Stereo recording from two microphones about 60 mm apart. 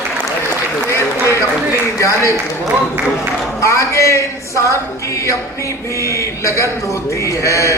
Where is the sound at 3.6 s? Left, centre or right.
Left.